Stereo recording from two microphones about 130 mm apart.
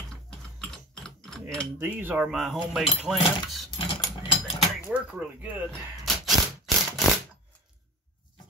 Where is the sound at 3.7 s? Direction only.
45° left (ahead or behind).